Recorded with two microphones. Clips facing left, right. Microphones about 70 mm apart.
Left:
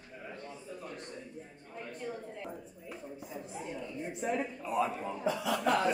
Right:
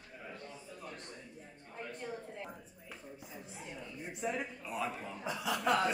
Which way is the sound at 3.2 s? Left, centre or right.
Left.